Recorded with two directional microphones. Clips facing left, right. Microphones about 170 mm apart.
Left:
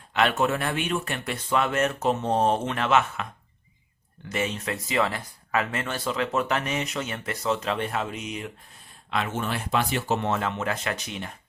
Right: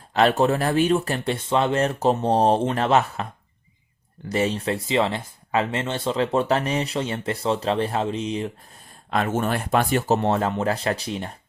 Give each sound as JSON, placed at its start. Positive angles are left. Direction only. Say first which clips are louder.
{"t": 0.1, "sound": "speech", "louder": "right 5 dB", "side_deg": -35}
{"t": 4.3, "sound": "speech", "louder": "right 6 dB", "side_deg": -35}
{"t": 9.0, "sound": "speech", "louder": "right 5 dB", "side_deg": -45}